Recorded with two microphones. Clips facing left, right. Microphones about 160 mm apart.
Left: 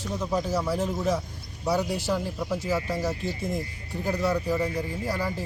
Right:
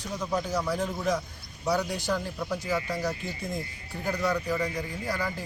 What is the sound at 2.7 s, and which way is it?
Speech, 30° left (ahead or behind).